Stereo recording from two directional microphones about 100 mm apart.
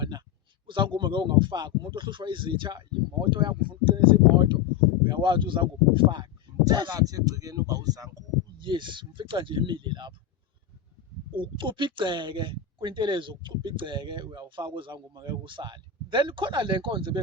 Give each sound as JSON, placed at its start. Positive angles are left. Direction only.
{"t": 0.7, "sound": "a man's voice", "side_deg": -55}
{"t": 6.7, "sound": "speech", "side_deg": -40}
{"t": 8.6, "sound": "a man's voice", "side_deg": -55}
{"t": 11.3, "sound": "a man's voice", "side_deg": -55}
{"t": 14.9, "sound": "a man's voice", "side_deg": -45}